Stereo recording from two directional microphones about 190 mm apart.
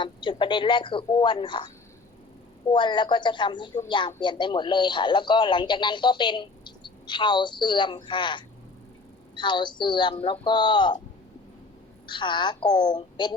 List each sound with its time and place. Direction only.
0.0 s speech: 25° left (ahead or behind)
12.0 s speech: 25° left (ahead or behind)